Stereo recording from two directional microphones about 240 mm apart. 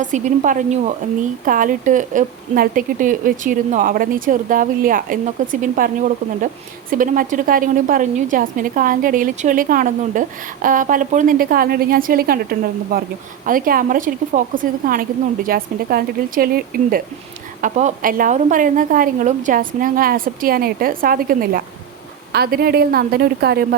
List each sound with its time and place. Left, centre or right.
0.0 s a woman's voice: right